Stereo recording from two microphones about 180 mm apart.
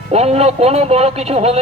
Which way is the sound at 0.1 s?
35° right (ahead or behind).